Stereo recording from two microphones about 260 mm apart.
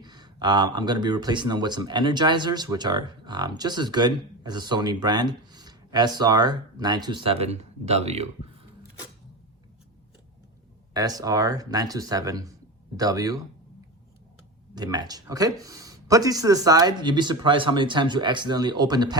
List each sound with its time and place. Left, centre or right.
0.0 s speech: centre
10.9 s speech: centre
14.8 s speech: centre